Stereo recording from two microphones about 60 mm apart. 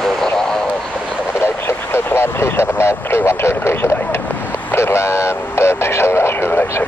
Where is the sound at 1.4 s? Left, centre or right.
Left.